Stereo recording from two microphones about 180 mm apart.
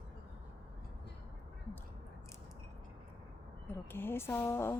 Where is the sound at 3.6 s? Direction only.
10° left (ahead or behind).